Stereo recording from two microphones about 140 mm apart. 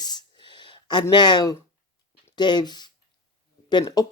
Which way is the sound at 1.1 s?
30° left (ahead or behind).